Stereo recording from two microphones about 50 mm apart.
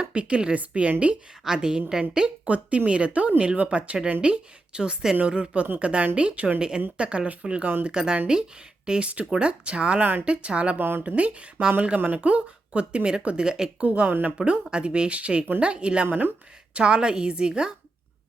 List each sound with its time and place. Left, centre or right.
0.0 s a woman's voice: right
2.5 s speech: right
6.6 s a woman's voice: centre
7.9 s speech: centre
10.0 s speech: right
10.2 s speech: right
10.8 s speech: right
11.0 s speech: right
11.9 s speech: right
12.2 s speech: right
14.1 s speech: right
14.3 s speech: right
16.0 s speech: right
16.7 s speech: centre